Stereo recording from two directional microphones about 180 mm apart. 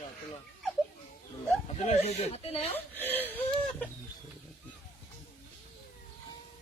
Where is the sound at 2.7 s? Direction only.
10° left (ahead or behind).